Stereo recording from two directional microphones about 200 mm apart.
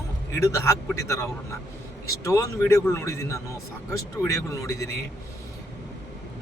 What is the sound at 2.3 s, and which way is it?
A man's voice, 15° left (ahead or behind).